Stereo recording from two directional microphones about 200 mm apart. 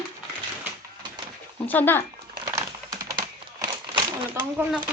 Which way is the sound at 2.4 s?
15° right (ahead or behind).